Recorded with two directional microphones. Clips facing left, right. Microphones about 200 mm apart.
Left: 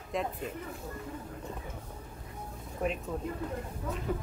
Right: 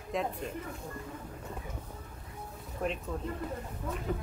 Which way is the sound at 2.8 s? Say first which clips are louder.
Left 1 dB; 5° left (ahead or behind).